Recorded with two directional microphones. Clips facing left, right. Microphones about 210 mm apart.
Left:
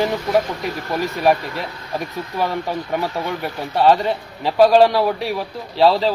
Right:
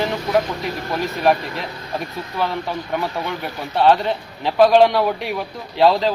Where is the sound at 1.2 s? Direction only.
10° left (ahead or behind).